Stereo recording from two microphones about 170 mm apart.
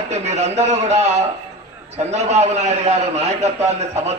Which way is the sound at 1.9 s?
40° right (ahead or behind).